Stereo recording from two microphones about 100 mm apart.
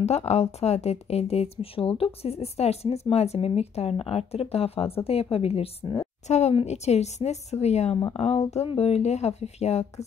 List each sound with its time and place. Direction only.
0.0 s speech: 90° left
6.3 s speech: 90° left